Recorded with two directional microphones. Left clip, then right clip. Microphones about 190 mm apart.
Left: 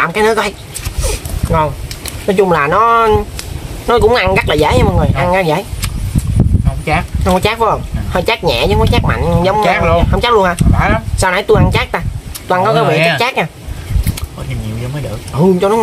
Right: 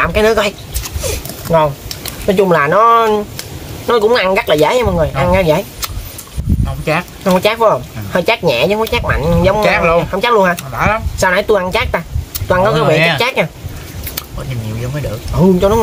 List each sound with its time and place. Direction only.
0.0 s speech: 10° left (ahead or behind)
1.0 s a sound: 5° left (ahead or behind)
2.2 s speech: 5° left (ahead or behind)
6.8 s speech: 15° right (ahead or behind)
7.2 s speech: 10° left (ahead or behind)
9.6 s speech: 20° right (ahead or behind)
10.1 s speech: 10° left (ahead or behind)
12.9 s speech: 15° right (ahead or behind)
13.2 s speech: 10° left (ahead or behind)
15.3 s speech: 10° left (ahead or behind)